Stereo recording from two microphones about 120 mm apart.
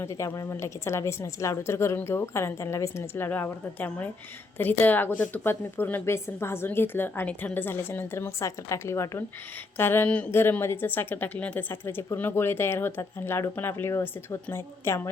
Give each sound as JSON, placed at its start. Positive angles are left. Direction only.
{"t": 0.0, "sound": "a woman's voice", "side_deg": 25}